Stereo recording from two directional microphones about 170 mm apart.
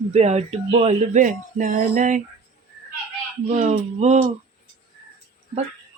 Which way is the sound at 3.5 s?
40° right (ahead or behind).